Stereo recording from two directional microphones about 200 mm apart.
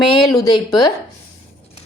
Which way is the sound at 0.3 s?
20° left (ahead or behind).